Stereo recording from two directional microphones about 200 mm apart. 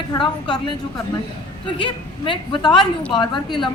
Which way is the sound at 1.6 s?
25° left (ahead or behind).